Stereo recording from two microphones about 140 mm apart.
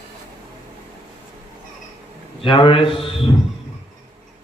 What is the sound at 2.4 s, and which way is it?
Speech, 35° left (ahead or behind).